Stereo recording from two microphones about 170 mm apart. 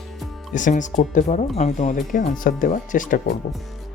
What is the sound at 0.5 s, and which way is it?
Speech, 50° left (ahead or behind).